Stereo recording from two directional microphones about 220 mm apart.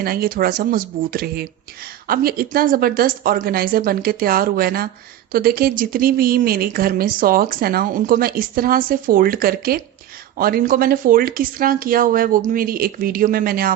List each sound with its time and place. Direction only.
0.0 s a woman's voice: 40° right (ahead or behind)